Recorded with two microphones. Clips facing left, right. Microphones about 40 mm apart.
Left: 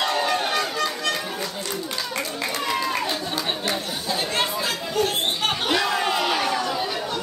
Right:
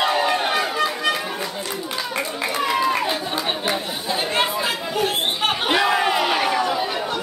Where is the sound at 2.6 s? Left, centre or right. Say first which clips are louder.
Right 5 dB; centre.